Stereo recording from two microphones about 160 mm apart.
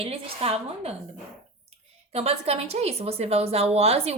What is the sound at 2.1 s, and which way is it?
Speech, 40° right (ahead or behind).